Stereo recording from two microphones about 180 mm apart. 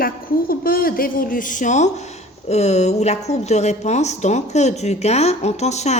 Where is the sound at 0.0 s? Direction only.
55° left (ahead or behind).